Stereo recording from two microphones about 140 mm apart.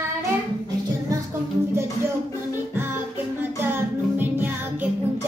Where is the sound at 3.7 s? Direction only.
15° right (ahead or behind).